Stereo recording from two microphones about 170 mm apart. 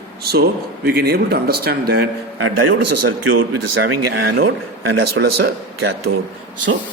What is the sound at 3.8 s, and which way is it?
Speech, 90° right.